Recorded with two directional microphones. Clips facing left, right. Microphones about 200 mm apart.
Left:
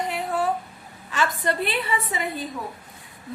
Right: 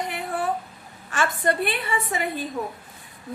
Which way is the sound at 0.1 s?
55° right (ahead or behind).